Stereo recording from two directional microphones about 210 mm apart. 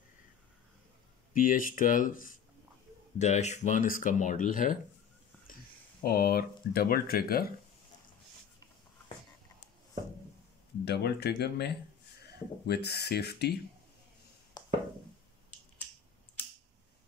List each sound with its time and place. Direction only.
1.3 s speech: 40° left (ahead or behind)
6.0 s speech: 45° left (ahead or behind)
10.9 s speech: 50° left (ahead or behind)
14.6 s a sound: 20° left (ahead or behind)